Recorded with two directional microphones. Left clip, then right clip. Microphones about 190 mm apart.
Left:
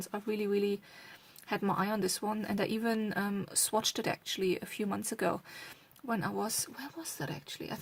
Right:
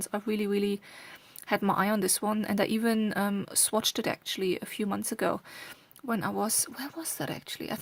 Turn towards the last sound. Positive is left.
turn(degrees=-40)  # may be behind; listen again after turning